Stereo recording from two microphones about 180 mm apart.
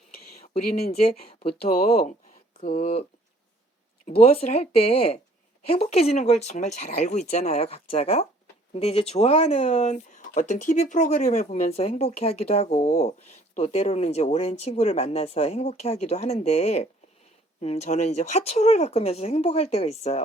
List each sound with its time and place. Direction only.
0.6 s speech: 55° left (ahead or behind)
1.4 s speech: 35° left (ahead or behind)
4.1 s speech: 35° left (ahead or behind)